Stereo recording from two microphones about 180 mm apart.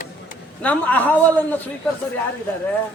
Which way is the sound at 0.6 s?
10° left (ahead or behind).